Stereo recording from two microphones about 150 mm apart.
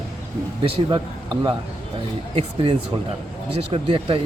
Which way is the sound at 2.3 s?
45° right (ahead or behind).